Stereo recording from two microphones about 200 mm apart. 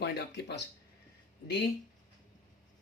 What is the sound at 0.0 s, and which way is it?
Speech, 55° left (ahead or behind).